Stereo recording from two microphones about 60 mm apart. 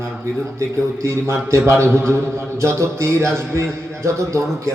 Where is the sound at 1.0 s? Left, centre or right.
Right.